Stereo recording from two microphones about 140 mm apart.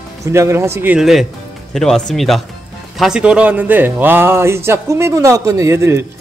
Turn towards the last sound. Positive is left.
turn(degrees=-20)  # may be behind; listen again after turning